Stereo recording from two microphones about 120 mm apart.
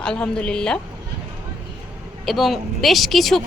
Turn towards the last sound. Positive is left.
turn(degrees=0)  # may be behind; listen again after turning